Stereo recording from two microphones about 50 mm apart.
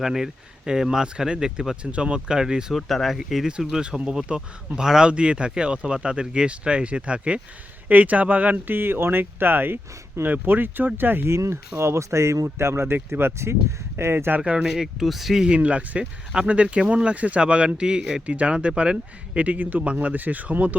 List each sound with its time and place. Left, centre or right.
0.0 s speech: centre
2.7 s speech: centre; by 8.5 s right
8.5 s speech: right
11.3 s speech: right
14.4 s speech: centre
15.4 s speech: right
18.3 s speech: right